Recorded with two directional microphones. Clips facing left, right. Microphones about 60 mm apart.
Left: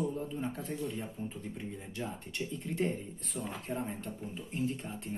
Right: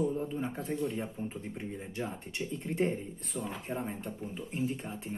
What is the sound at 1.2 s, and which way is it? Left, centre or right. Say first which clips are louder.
Speech: right 2 dB; centre.